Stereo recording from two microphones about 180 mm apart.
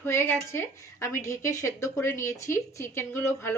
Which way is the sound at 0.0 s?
15° left (ahead or behind).